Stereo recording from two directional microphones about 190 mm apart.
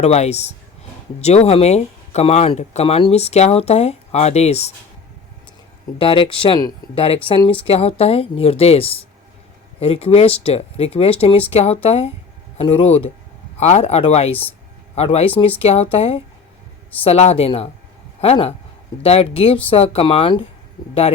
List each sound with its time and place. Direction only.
0.0 s speech: 35° left (ahead or behind)
6.0 s speech: 30° left (ahead or behind)